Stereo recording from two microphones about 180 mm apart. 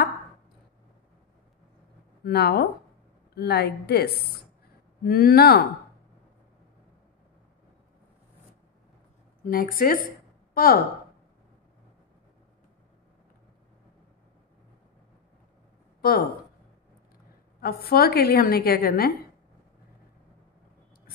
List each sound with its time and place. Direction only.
2.2 s a woman's voice: 60° left (ahead or behind)
9.4 s speech: 50° left (ahead or behind)
16.0 s speech: 55° left (ahead or behind)
17.6 s a woman's voice: 60° left (ahead or behind)